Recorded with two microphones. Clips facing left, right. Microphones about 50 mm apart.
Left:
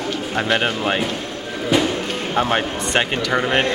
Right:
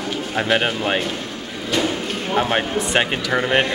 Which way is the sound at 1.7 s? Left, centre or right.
Centre.